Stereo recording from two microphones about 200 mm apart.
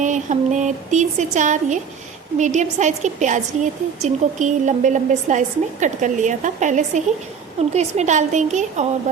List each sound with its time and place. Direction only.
0.0 s a woman's voice: 40° right (ahead or behind)